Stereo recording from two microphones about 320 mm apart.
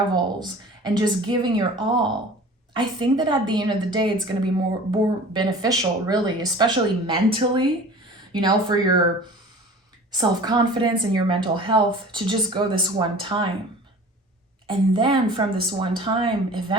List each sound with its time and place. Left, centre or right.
0.1 s a woman's voice: centre
10.1 s a woman's voice: centre
14.7 s a woman's voice: centre